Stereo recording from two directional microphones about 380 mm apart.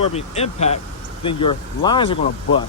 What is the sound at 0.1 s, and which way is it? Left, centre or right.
Speech, centre.